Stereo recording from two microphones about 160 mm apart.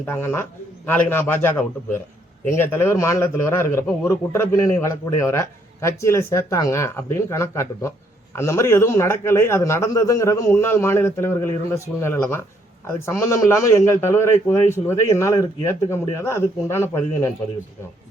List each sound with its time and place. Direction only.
0.0 s a man's voice: 15° left (ahead or behind)